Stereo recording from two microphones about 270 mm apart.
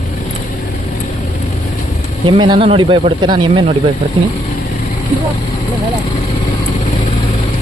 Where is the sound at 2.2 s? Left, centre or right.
Centre.